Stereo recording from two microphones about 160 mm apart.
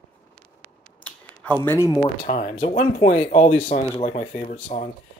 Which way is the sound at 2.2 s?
45° left (ahead or behind).